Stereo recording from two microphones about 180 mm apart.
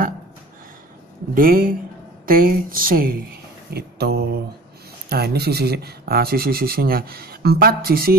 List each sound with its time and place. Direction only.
1.3 s a woman's voice: 55° right (ahead or behind)
3.7 s speech: 65° right (ahead or behind)